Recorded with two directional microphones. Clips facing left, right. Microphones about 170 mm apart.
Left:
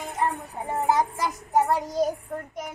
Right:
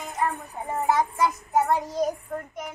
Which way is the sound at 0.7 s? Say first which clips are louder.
Even; 35° left (ahead or behind).